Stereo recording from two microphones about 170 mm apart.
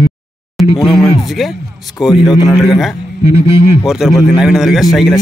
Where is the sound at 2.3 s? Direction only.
20° left (ahead or behind).